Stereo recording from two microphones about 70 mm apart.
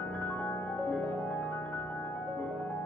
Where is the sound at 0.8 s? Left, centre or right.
Left.